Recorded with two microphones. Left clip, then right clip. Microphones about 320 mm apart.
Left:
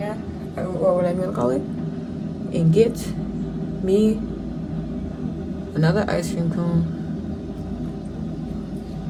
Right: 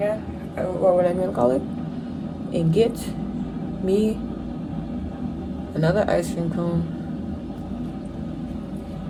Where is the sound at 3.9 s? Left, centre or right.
Centre.